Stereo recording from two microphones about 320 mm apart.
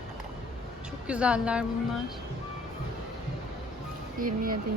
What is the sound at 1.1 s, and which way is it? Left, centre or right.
Speech, centre.